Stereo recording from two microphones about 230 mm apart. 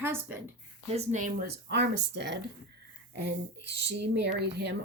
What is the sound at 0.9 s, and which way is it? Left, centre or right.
Speech, right.